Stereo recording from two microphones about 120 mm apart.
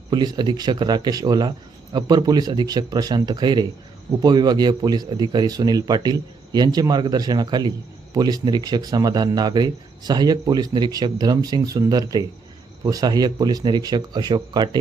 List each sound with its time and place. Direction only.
0.1 s speech: 35° right (ahead or behind)